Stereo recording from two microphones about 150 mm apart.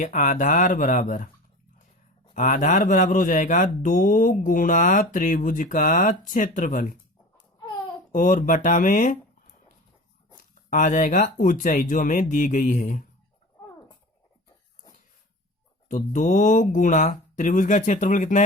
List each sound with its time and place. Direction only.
0.0 s speech: 60° left (ahead or behind)
2.3 s speech: 60° left (ahead or behind)
10.7 s speech: 60° left (ahead or behind)
15.9 s speech: 55° left (ahead or behind)